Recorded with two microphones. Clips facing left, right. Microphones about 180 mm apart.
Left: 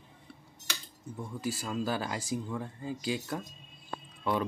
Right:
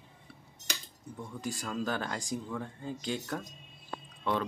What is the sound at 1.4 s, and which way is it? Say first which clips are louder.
Speech: left 2 dB; 5° left (ahead or behind).